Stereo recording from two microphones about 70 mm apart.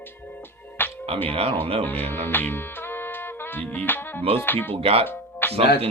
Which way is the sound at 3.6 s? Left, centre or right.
Left.